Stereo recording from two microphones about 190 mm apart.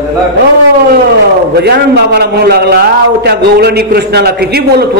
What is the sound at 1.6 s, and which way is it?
Speech, 60° right (ahead or behind).